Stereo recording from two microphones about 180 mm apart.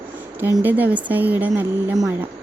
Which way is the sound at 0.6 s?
10° right (ahead or behind).